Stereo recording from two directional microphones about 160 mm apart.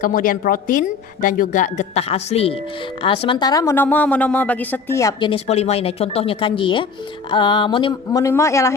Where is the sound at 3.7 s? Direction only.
10° left (ahead or behind).